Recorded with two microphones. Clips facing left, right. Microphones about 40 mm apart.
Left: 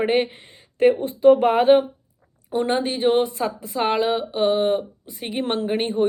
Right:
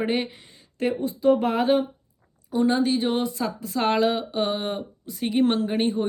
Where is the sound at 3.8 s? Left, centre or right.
Centre.